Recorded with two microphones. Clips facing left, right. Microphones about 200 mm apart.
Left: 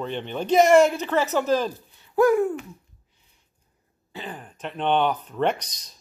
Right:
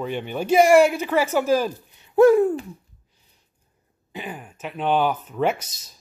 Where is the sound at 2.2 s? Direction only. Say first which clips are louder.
Right 5 dB; 30° right (ahead or behind).